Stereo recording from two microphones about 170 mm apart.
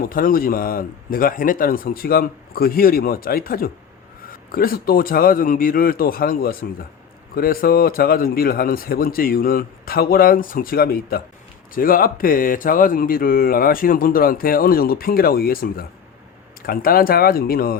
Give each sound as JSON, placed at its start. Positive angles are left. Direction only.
{"t": 0.0, "sound": "a man's voice", "side_deg": 55}